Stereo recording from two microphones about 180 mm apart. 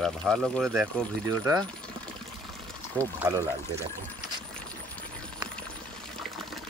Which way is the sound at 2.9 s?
15° right (ahead or behind).